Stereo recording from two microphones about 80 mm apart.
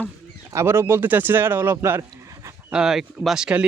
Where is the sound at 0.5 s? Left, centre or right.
Right.